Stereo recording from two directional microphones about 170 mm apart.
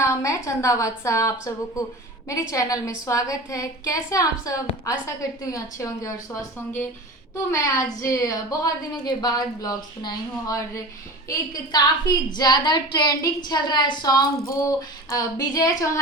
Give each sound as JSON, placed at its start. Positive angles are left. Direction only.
{"t": 0.0, "sound": "a woman's voice", "side_deg": 15}
{"t": 8.0, "sound": "a woman's voice", "side_deg": 20}